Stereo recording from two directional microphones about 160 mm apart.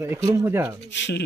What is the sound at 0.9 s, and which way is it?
Speech, 90° left.